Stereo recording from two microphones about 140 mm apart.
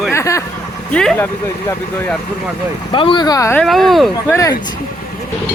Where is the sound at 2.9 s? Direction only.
35° left (ahead or behind).